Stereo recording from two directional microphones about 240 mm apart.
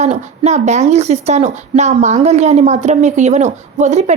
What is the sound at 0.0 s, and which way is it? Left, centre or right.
A woman's voice, right.